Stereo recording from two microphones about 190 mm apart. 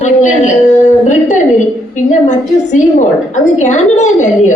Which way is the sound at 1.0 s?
40° left (ahead or behind).